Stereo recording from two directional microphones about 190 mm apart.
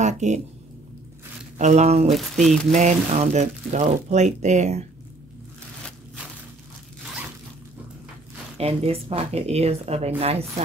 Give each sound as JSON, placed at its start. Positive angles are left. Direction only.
{"t": 0.0, "sound": "speech", "side_deg": -40}
{"t": 1.6, "sound": "speech", "side_deg": -40}
{"t": 2.1, "sound": "speech", "side_deg": 0}
{"t": 2.7, "sound": "speech", "side_deg": -35}
{"t": 8.5, "sound": "speech", "side_deg": -30}